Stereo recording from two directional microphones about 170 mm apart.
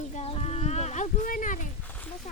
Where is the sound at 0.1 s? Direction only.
35° left (ahead or behind).